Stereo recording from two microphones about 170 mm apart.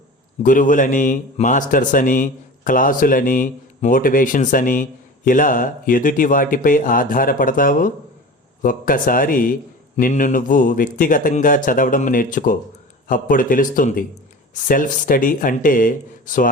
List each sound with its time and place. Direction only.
0.4 s a man's voice: 50° left (ahead or behind)